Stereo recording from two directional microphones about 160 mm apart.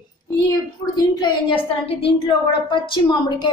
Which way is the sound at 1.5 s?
35° left (ahead or behind).